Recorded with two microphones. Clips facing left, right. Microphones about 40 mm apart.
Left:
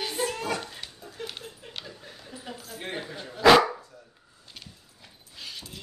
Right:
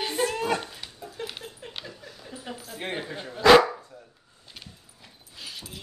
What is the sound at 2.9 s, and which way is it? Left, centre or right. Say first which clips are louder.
Speech: right 2 dB; right.